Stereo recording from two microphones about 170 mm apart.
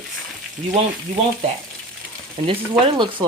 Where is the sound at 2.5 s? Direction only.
30° right (ahead or behind).